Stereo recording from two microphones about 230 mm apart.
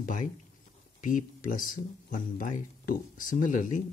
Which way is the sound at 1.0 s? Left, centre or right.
Left.